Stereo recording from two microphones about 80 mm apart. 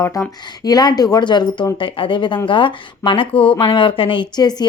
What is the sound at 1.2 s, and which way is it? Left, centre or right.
A woman's voice, left.